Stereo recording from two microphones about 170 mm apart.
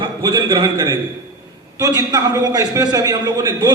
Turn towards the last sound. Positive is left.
turn(degrees=-20)  # may be behind; listen again after turning